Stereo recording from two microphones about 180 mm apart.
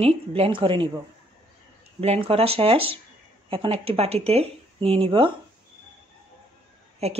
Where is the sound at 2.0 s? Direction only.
35° right (ahead or behind).